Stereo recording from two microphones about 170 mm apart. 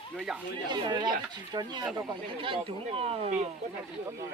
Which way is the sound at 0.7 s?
25° right (ahead or behind).